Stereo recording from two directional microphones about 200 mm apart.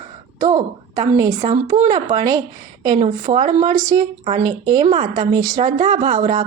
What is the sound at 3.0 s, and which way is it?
Speech, 35° right (ahead or behind).